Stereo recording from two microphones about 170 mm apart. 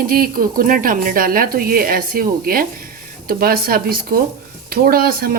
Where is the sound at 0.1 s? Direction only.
55° right (ahead or behind).